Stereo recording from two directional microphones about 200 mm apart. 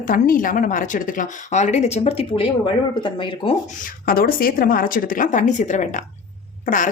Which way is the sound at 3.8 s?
45° left (ahead or behind).